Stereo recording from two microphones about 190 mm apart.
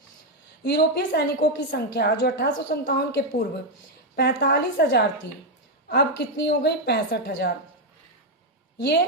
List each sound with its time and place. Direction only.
0.6 s a woman's voice: 60° left (ahead or behind)